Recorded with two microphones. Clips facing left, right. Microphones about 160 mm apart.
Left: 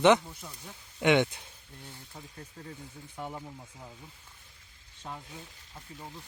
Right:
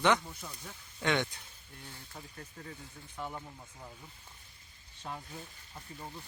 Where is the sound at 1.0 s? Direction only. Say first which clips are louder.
Left 7 dB; 20° left (ahead or behind).